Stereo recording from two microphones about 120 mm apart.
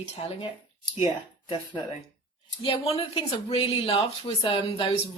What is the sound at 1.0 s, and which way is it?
Speech, 40° left (ahead or behind).